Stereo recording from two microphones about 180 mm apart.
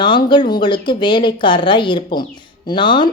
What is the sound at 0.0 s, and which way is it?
A woman's voice, 25° left (ahead or behind).